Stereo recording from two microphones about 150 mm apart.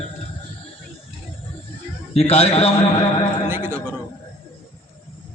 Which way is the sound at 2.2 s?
40° left (ahead or behind).